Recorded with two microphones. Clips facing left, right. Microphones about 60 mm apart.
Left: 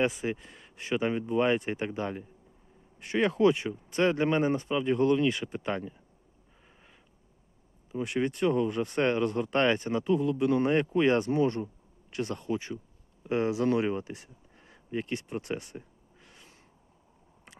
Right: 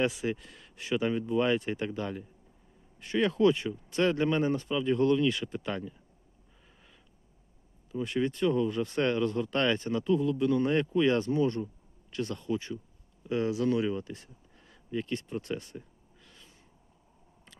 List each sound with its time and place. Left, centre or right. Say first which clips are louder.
0.3 s speech: even; centre
1.9 s speech: left 1 dB; left
6.7 s a sound: left 2 dB; left
7.9 s speech: even; left
12.5 s speech: even; left
13.2 s speech: left 2 dB; left
16.2 s snort: left 1 dB; left